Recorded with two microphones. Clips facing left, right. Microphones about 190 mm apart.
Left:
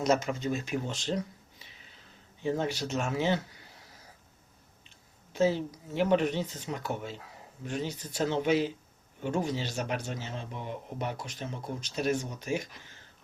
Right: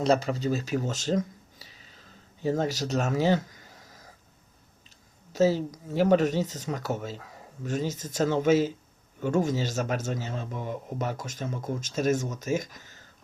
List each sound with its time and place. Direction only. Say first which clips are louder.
0.0 s speech: right 3 dB; 35° right (ahead or behind)
5.3 s speech: right 4 dB; 40° right (ahead or behind)